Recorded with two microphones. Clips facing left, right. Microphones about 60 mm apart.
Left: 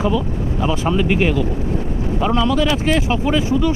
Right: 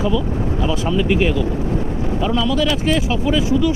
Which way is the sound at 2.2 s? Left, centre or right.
Left.